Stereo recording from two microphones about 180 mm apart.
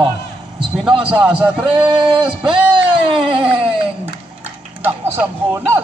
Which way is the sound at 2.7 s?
30° right (ahead or behind).